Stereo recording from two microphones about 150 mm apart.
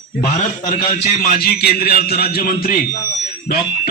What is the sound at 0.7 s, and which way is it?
A man's voice, 75° left (ahead or behind).